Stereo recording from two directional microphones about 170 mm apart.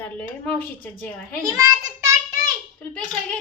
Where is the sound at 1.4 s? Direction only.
20° right (ahead or behind).